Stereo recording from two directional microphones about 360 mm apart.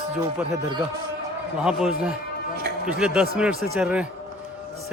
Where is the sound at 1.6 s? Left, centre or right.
Centre.